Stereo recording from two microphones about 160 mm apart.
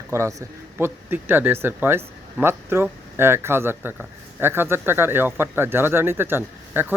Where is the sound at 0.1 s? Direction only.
20° right (ahead or behind).